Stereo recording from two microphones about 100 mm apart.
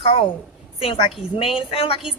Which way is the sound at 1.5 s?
65° left (ahead or behind).